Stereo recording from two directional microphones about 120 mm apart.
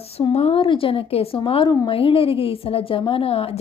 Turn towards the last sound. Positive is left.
turn(degrees=55)  # may be behind; listen again after turning